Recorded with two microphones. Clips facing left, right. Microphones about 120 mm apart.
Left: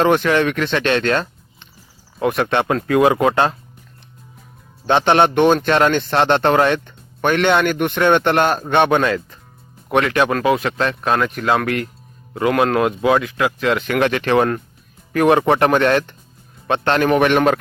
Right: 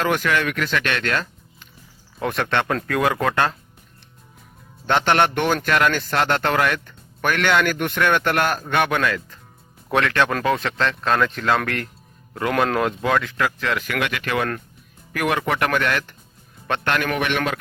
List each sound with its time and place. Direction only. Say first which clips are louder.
0.0 s speech: left 6 dB; 30° left (ahead or behind)
2.2 s speech: left 5 dB; 15° left (ahead or behind)
4.9 s speech: left 4 dB; 20° left (ahead or behind)
9.9 s speech: left 3 dB; 15° left (ahead or behind)
16.9 s speech: left 9 dB; 30° left (ahead or behind)